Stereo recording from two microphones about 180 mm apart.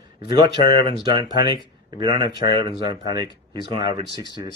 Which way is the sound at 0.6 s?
60° left (ahead or behind).